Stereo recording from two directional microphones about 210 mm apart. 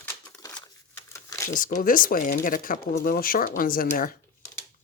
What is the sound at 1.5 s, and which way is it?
Speech, 40° left (ahead or behind).